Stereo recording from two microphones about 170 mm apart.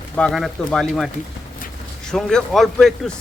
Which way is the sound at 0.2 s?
Centre (ahead or behind).